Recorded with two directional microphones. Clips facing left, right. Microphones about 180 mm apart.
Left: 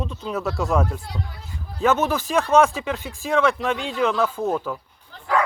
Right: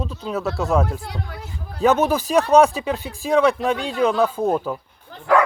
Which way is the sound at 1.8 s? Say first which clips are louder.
Right 3 dB; 15° right (ahead or behind).